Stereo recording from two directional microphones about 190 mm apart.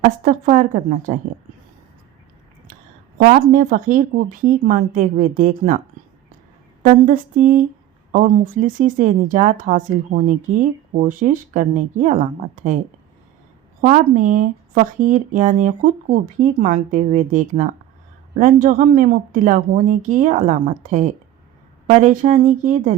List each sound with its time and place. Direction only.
0.0 s a woman's voice: 45° right (ahead or behind)
3.2 s a woman's voice: 50° right (ahead or behind)
6.8 s a woman's voice: 45° right (ahead or behind)
13.8 s a woman's voice: 40° right (ahead or behind)